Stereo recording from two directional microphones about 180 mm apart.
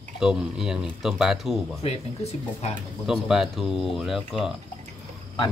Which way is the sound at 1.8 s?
35° left (ahead or behind).